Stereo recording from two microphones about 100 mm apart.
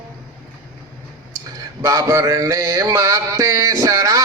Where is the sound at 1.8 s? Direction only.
35° right (ahead or behind).